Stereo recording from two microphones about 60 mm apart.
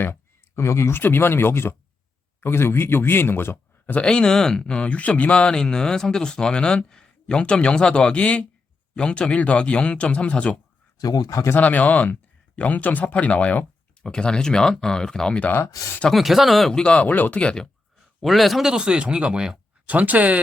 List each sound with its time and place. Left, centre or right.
0.0 s speech: left
3.9 s speech: centre
10.9 s speech: left
11.6 s speech: left
14.0 s speech: centre
16.1 s speech: centre
16.8 s speech: left
17.4 s speech: centre
18.2 s speech: centre
20.0 s speech: right